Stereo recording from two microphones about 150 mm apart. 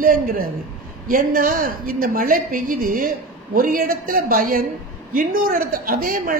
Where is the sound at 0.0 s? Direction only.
65° right (ahead or behind).